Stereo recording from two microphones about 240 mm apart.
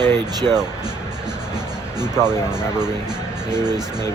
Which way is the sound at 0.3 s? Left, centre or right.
Centre.